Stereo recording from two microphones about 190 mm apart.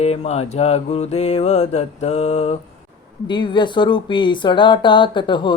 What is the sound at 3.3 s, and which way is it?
Speech, 25° left (ahead or behind).